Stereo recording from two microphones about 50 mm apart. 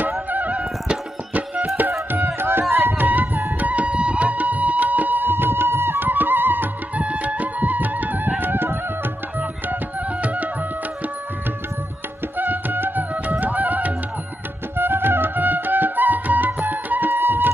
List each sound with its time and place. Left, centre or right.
0.3 s music: right
1.8 s tabla: right
2.7 s a sound: right
3.5 s music: right
7.0 s music: right
10.2 s music: right
12.4 s music: right
14.8 s music: right